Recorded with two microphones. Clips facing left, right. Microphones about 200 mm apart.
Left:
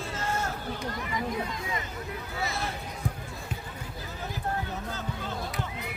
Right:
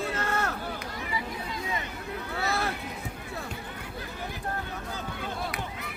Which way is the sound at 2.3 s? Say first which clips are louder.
Right 3 dB; 65° right (ahead or behind).